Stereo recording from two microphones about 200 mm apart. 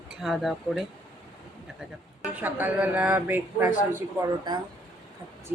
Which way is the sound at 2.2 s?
10° right (ahead or behind).